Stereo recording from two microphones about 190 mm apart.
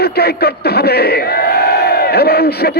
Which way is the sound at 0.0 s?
55° left (ahead or behind).